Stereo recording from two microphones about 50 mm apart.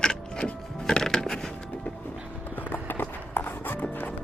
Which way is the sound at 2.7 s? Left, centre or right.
Left.